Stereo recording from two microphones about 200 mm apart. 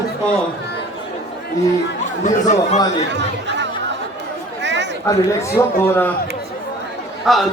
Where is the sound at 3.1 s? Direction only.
60° right (ahead or behind).